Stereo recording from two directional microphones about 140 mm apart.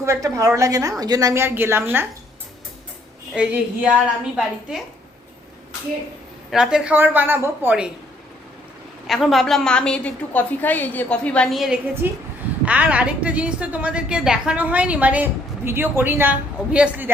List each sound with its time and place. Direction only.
0.0 s a woman's voice: 20° right (ahead or behind)
3.3 s a woman's voice: 10° right (ahead or behind)
6.5 s a woman's voice: 5° right (ahead or behind)
9.0 s a woman's voice: centre (ahead or behind)
12.0 s a woman's voice: 15° right (ahead or behind)